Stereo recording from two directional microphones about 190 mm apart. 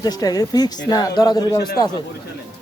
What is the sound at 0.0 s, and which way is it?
Speech, 20° left (ahead or behind).